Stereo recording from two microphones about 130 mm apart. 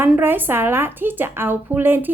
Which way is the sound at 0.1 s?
15° right (ahead or behind).